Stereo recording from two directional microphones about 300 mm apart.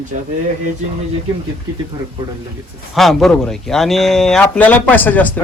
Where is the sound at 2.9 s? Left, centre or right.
Centre.